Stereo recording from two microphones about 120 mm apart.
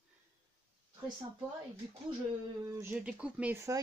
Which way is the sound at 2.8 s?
10° right (ahead or behind).